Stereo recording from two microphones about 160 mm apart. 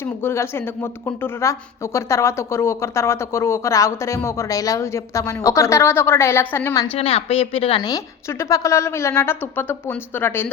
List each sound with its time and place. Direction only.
0.0 s speech: 15° left (ahead or behind)
6.8 s a woman's voice: 35° left (ahead or behind)
7.8 s speech: 25° left (ahead or behind)